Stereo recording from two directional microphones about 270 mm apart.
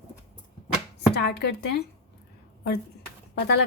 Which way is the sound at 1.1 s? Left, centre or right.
Left.